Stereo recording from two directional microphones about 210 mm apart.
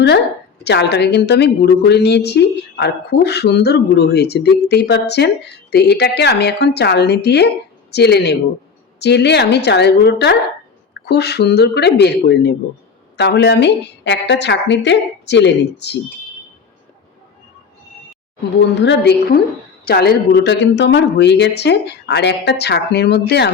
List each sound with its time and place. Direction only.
0.6 s a woman's voice: 55° left (ahead or behind)
18.5 s a woman's voice: 55° left (ahead or behind)